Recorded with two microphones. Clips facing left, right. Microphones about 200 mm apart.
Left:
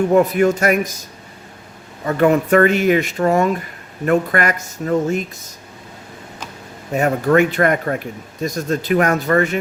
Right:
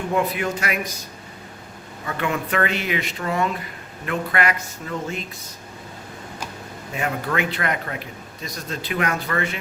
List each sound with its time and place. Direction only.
0.1 s a man's voice: 45° left (ahead or behind)
2.0 s a man's voice: 40° left (ahead or behind)
6.9 s a man's voice: 45° left (ahead or behind)